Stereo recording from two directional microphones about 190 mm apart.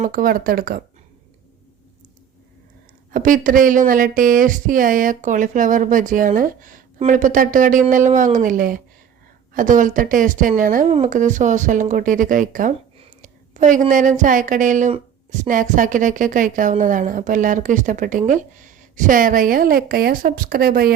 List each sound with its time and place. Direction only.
0.0 s a woman's voice: 45° right (ahead or behind)
3.1 s a woman's voice: 45° right (ahead or behind)